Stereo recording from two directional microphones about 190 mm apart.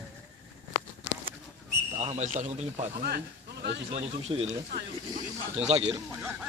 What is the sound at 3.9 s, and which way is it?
Speech, 35° right (ahead or behind).